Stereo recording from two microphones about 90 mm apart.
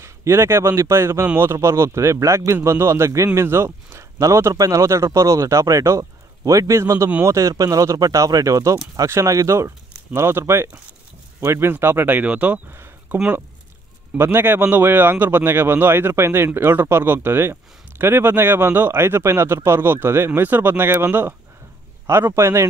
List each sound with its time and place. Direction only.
0.0 s speech: 30° right (ahead or behind)